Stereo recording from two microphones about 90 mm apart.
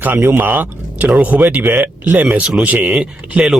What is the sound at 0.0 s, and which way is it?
A man's voice, 20° right (ahead or behind).